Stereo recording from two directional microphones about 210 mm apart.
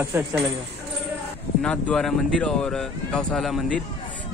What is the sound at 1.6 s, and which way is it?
Speech, 5° left (ahead or behind).